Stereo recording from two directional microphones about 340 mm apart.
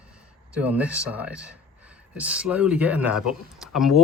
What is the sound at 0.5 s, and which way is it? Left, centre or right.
Speech, centre.